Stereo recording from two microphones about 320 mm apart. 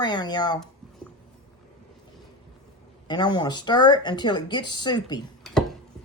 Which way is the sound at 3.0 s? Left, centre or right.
Centre.